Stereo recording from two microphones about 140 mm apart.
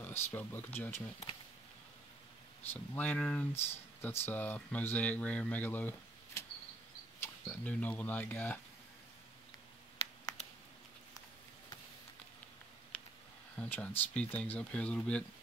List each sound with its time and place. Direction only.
0.0 s speech: 15° left (ahead or behind)
2.7 s speech: 15° left (ahead or behind)
7.4 s speech: 10° left (ahead or behind)
10.4 s a sound: 50° left (ahead or behind)
12.9 s a sound: 10° left (ahead or behind)
13.6 s speech: 10° left (ahead or behind)